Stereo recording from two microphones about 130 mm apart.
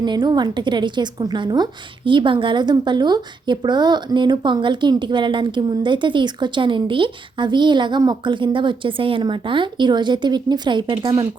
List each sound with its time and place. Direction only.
0.0 s a woman's voice: 35° right (ahead or behind)